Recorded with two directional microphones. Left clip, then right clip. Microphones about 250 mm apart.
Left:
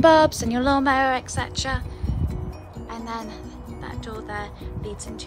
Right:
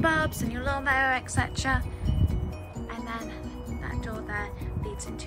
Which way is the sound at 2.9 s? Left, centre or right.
Centre.